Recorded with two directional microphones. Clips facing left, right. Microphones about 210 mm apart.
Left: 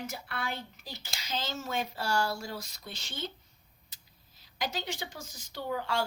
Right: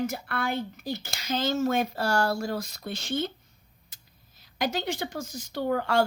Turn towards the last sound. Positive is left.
turn(degrees=-55)  # may be behind; listen again after turning